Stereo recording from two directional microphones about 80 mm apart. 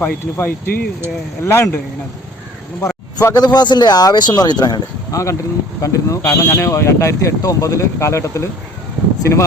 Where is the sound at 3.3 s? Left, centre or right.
Left.